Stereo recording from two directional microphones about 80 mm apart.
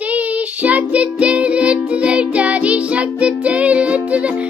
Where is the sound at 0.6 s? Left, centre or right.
Centre.